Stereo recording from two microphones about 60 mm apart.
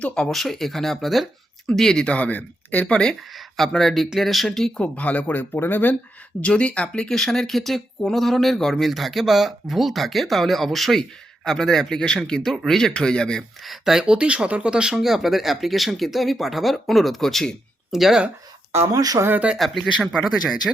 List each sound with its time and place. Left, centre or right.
0.0 s speech: centre
2.1 s speech: left
3.7 s speech: centre
4.8 s speech: left
6.4 s speech: centre
13.7 s speech: centre
14.0 s speech: centre
18.7 s speech: right
18.9 s speech: right
19.5 s speech: centre